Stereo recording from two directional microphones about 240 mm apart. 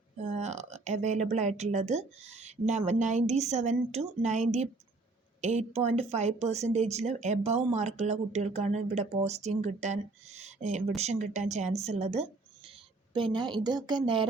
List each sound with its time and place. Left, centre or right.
0.2 s speech: right